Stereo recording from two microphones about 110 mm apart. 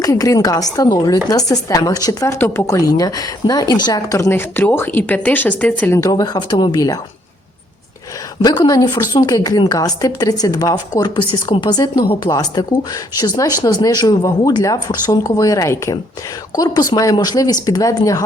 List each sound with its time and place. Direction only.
0.0 s a woman's voice: 30° left (ahead or behind)
4.3 s speech: 20° left (ahead or behind)
6.0 s a woman's voice: 35° left (ahead or behind)
8.4 s a woman's voice: 35° left (ahead or behind)